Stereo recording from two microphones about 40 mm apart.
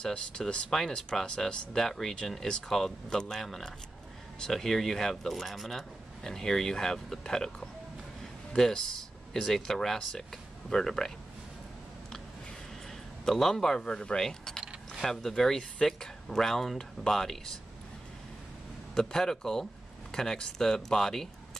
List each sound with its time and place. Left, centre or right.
0.1 s speech: left
0.7 s speech: centre
6.2 s speech: centre
13.3 s speech: centre
14.2 s speech: centre
18.9 s speech: centre